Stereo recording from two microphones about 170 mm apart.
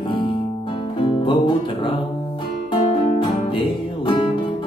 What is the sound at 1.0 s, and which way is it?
Music, 30° left (ahead or behind).